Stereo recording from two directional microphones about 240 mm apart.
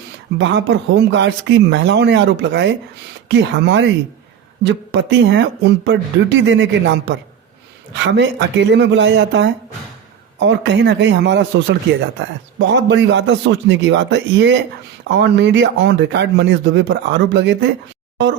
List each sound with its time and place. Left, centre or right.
0.3 s speech: right